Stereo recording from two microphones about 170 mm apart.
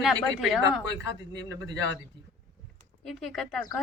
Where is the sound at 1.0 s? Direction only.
90° left.